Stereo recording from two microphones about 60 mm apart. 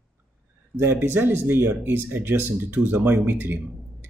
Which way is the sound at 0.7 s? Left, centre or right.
Right.